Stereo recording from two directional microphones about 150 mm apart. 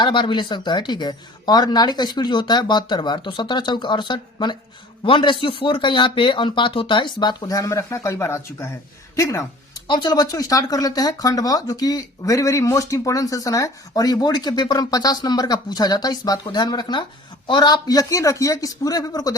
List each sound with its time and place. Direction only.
0.0 s speech: 30° left (ahead or behind)
9.1 s a sound: 20° left (ahead or behind)
9.8 s speech: 30° left (ahead or behind)